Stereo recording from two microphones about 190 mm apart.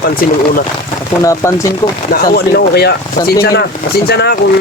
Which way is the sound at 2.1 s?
55° left (ahead or behind).